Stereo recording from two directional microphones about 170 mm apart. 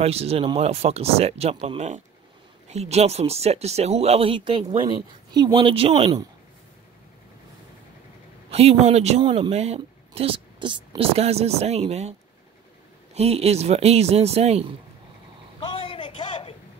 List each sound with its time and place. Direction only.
0.0 s speech: 35° right (ahead or behind)
8.5 s speech: 35° right (ahead or behind)
15.6 s a sound: 30° left (ahead or behind)